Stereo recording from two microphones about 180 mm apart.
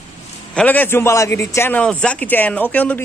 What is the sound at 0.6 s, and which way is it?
A man's voice, 10° left (ahead or behind).